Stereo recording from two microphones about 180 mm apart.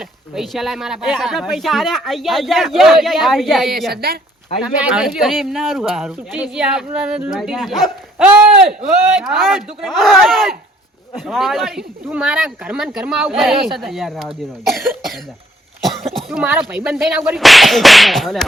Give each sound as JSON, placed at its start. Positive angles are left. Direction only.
{"t": 0.0, "sound": "speech", "side_deg": 0}
{"t": 3.9, "sound": "speech", "side_deg": -60}
{"t": 4.6, "sound": "speech", "side_deg": -5}
{"t": 15.8, "sound": "speech", "side_deg": 0}